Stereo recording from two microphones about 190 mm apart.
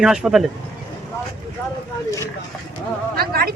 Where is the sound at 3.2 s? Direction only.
55° right (ahead or behind).